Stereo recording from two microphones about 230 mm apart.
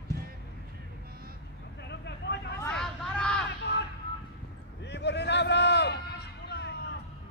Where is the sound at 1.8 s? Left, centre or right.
Left.